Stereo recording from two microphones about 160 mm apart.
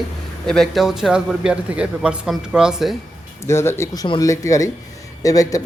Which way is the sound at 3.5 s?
15° left (ahead or behind).